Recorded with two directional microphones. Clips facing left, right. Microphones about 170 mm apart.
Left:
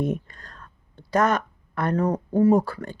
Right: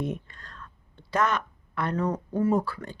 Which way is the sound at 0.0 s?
45° left (ahead or behind).